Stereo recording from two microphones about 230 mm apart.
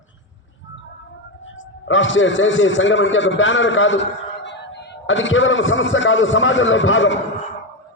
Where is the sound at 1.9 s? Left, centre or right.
Left.